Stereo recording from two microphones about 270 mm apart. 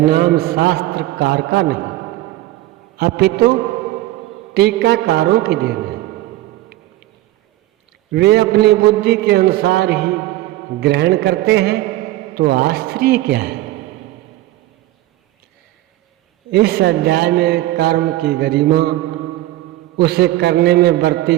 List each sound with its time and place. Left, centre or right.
0.0 s a man's voice: right
3.0 s a man's voice: right
4.5 s a man's voice: right
8.1 s a man's voice: right
16.5 s a man's voice: right
20.0 s a man's voice: right